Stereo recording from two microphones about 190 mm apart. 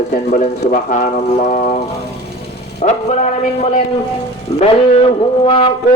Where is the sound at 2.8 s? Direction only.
45° left (ahead or behind).